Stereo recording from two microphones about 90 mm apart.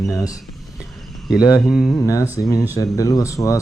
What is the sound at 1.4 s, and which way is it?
Speech, 40° left (ahead or behind).